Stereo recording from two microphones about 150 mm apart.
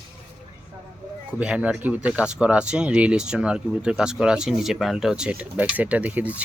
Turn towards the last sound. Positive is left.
turn(degrees=-10)  # may be behind; listen again after turning